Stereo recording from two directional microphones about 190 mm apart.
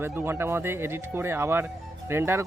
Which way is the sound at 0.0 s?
10° right (ahead or behind).